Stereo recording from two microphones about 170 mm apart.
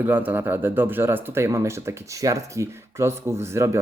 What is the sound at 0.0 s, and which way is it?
Speech, 10° right (ahead or behind).